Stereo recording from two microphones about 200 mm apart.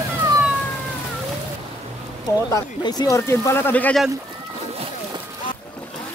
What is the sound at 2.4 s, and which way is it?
Speech, 20° left (ahead or behind).